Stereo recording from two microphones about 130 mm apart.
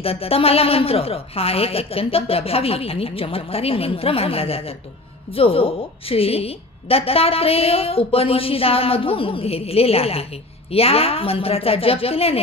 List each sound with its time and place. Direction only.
0.0 s a woman's voice: 50° left (ahead or behind)